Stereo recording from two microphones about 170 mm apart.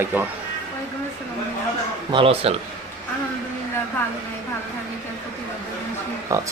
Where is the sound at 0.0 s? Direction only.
10° right (ahead or behind).